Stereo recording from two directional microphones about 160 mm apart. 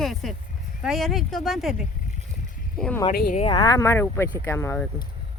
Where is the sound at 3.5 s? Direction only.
25° left (ahead or behind).